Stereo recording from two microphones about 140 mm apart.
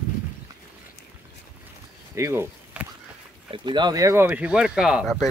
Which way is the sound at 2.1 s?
20° right (ahead or behind).